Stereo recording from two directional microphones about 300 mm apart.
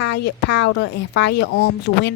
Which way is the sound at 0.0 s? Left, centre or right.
Left.